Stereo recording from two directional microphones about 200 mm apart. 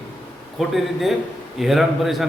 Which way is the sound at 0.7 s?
Centre (ahead or behind).